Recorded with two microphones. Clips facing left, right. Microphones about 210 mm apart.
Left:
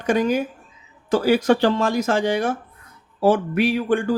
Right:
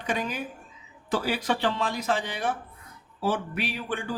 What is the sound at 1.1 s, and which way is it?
A man's voice, 45° left (ahead or behind).